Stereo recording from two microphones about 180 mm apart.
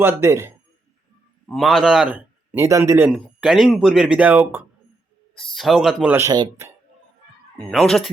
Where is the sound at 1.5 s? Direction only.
Centre (ahead or behind).